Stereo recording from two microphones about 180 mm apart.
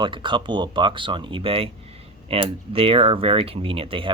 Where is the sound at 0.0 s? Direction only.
25° right (ahead or behind).